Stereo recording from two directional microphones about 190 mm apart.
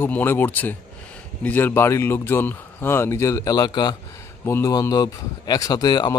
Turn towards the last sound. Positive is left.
turn(degrees=20)  # may be behind; listen again after turning